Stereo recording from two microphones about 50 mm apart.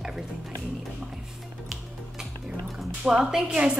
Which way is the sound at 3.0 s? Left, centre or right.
Centre.